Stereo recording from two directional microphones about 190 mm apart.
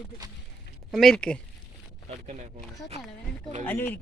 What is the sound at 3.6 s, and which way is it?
Speech, 10° left (ahead or behind).